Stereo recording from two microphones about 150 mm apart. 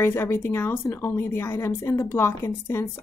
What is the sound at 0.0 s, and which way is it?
A woman's voice, 15° left (ahead or behind).